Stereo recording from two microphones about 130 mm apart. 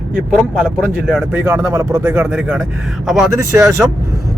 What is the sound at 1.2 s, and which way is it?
Speech, 20° right (ahead or behind).